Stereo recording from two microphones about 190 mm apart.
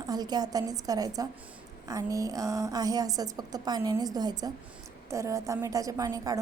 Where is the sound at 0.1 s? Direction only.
20° right (ahead or behind).